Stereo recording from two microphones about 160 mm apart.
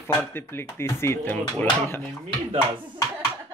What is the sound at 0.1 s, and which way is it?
Speech, 15° left (ahead or behind).